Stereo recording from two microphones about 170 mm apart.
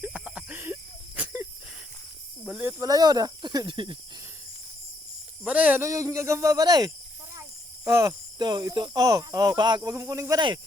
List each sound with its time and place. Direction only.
0.0 s a sound: 5° right (ahead or behind)
2.4 s speech: 5° right (ahead or behind); by 3.9 s 30° right (ahead or behind)
5.4 s speech: 10° right (ahead or behind); by 10.6 s 25° right (ahead or behind)